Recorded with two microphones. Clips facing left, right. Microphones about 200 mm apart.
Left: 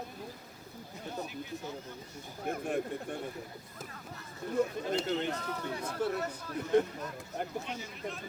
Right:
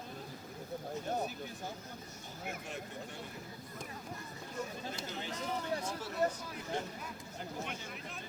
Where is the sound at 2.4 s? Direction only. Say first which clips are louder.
Left 10 dB; 55° left (ahead or behind).